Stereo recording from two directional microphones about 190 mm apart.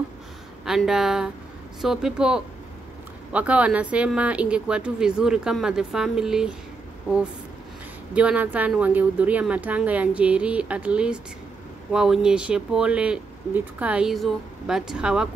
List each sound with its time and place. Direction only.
0.7 s speech: centre (ahead or behind)
8.1 s a woman's voice: 5° right (ahead or behind)